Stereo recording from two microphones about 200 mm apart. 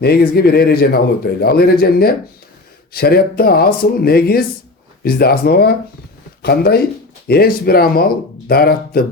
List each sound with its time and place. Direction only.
0.0 s a man's voice: 50° left (ahead or behind)